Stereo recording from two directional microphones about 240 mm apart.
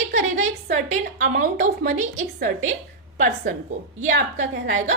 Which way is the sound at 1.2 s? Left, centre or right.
Right.